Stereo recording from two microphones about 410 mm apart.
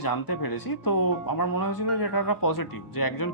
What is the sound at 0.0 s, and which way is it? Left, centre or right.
Speech, left.